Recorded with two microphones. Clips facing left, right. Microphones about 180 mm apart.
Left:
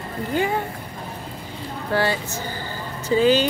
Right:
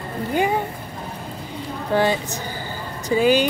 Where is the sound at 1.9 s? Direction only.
15° right (ahead or behind).